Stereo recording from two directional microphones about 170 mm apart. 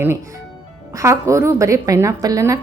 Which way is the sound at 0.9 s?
15° right (ahead or behind).